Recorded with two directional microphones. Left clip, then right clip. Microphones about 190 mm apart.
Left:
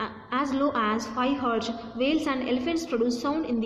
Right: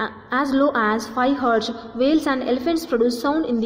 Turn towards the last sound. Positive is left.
turn(degrees=-25)  # may be behind; listen again after turning